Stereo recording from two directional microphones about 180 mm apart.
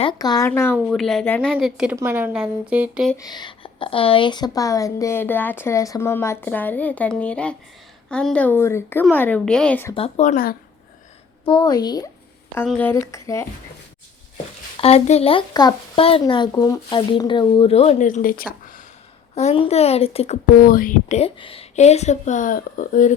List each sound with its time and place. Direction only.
0.0 s speech: 25° left (ahead or behind)
0.9 s a woman's voice: centre (ahead or behind)
1.5 s a woman's voice: 5° right (ahead or behind)
3.2 s a woman's voice: 25° left (ahead or behind)
9.9 s speech: 35° left (ahead or behind); by 10.6 s 55° left (ahead or behind)
11.4 s speech: 25° left (ahead or behind)
12.6 s a woman's voice: 5° left (ahead or behind)
14.8 s a child's voice: 35° left (ahead or behind); by 18.8 s 50° left (ahead or behind)
19.3 s a child's voice: 35° left (ahead or behind)
20.6 s speech: 55° left (ahead or behind)